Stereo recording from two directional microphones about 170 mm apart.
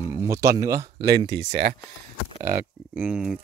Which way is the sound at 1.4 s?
75° right (ahead or behind).